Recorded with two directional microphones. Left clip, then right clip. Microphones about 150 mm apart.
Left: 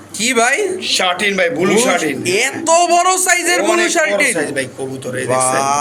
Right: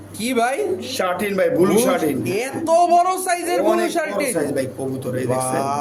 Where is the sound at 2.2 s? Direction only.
5° left (ahead or behind).